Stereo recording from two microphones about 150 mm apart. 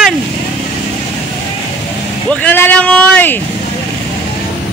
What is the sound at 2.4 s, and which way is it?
Speech, 10° left (ahead or behind).